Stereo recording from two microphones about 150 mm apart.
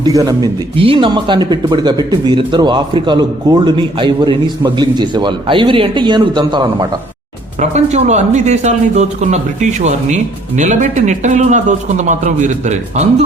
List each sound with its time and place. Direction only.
0.0 s speech: 25° right (ahead or behind)
0.8 s speech: 35° right (ahead or behind)
7.6 s speech: 50° right (ahead or behind)